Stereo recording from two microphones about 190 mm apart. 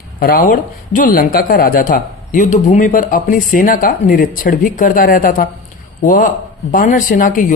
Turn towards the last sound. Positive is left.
turn(degrees=45)  # may be behind; listen again after turning